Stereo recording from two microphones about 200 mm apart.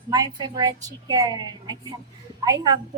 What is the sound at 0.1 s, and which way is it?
A woman's voice, 20° right (ahead or behind).